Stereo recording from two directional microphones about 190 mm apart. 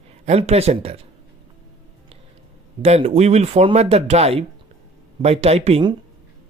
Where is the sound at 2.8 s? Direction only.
35° right (ahead or behind).